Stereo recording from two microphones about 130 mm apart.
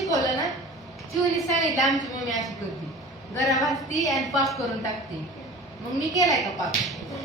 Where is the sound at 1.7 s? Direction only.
Centre (ahead or behind).